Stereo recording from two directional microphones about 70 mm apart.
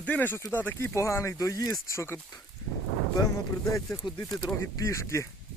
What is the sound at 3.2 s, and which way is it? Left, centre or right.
Speech, left.